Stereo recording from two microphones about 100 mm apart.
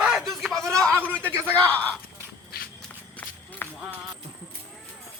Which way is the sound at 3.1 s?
20° left (ahead or behind).